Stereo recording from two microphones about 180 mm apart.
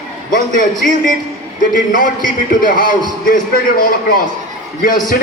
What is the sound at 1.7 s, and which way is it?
Speech, 50° left (ahead or behind).